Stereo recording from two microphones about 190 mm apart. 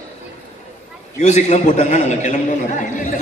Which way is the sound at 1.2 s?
35° left (ahead or behind).